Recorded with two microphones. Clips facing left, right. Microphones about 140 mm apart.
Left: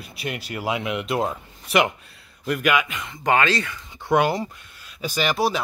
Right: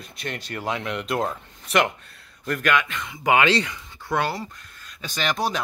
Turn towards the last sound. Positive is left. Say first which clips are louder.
# left 3 dB
turn(degrees=5)  # may be behind; listen again after turning